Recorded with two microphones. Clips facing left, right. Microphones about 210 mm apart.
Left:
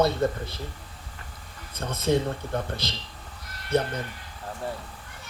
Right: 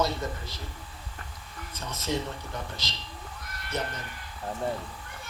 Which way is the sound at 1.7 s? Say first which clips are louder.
Left 7 dB; 55° left (ahead or behind).